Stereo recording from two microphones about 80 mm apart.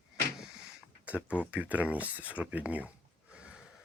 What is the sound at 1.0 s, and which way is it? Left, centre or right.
Speech, centre.